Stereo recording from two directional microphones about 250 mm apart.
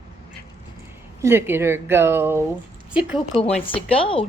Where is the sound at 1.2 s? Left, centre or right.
Centre.